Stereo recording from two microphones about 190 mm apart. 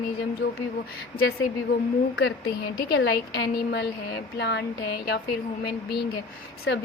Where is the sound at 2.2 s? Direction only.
60° left (ahead or behind).